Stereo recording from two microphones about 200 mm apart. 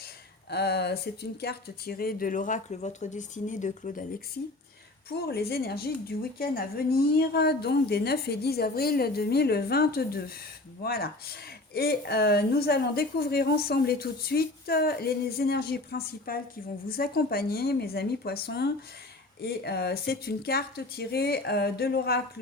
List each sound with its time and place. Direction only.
0.5 s speech: 55° left (ahead or behind); by 4.0 s 40° left (ahead or behind)
5.0 s speech: 50° left (ahead or behind)